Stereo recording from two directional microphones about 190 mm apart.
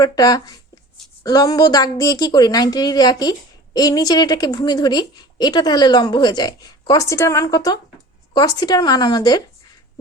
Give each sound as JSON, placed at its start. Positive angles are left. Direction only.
{"t": 0.0, "sound": "a woman's voice", "side_deg": 20}